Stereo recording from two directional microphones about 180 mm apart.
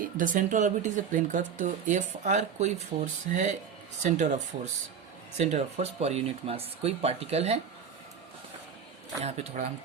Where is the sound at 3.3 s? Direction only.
40° right (ahead or behind).